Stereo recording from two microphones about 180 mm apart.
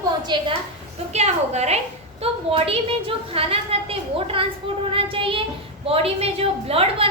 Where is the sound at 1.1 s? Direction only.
35° right (ahead or behind).